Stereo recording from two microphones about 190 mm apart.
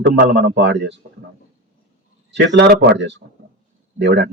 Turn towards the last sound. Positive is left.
turn(degrees=-65)  # may be behind; listen again after turning